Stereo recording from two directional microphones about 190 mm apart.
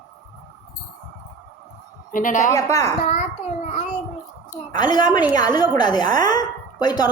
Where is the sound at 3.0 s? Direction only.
35° left (ahead or behind).